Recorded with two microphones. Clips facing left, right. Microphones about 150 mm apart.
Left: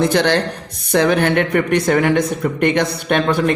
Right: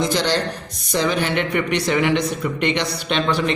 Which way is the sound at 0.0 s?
60° left (ahead or behind).